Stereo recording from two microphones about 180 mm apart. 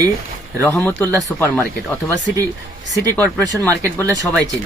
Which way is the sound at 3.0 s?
20° right (ahead or behind).